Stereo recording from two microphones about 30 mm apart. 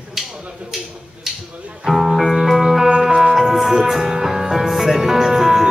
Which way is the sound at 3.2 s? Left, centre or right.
Centre.